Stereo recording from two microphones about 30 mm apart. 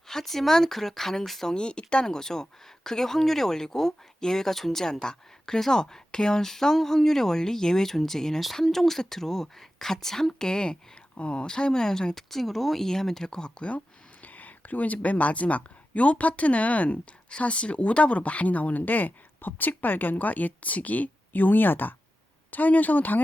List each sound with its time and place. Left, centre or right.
0.1 s speech: centre
1.5 s speech: left
2.0 s speech: centre
5.5 s speech: centre
5.8 s speech: left
6.4 s speech: centre
11.2 s speech: left
11.4 s speech: left
12.3 s speech: centre; by 13.5 s left
13.7 s a sound: left
15.0 s speech: left
17.4 s speech: left
22.5 s speech: left